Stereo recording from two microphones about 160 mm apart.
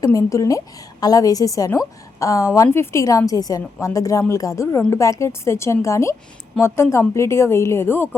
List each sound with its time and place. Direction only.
0.0 s a woman's voice: 20° left (ahead or behind)